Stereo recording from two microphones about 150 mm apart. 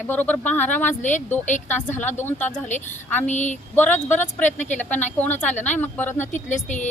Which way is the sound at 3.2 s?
50° left (ahead or behind).